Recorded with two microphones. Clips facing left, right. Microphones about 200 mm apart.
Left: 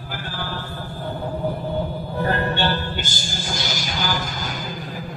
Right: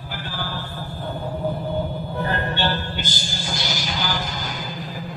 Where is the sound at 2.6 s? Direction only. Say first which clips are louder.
Left 1 dB; 50° left (ahead or behind).